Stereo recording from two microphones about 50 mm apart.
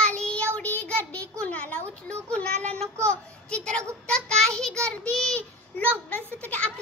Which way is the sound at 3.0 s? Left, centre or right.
Left.